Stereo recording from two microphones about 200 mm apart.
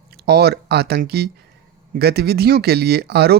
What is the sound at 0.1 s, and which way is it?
Speech, 50° right (ahead or behind).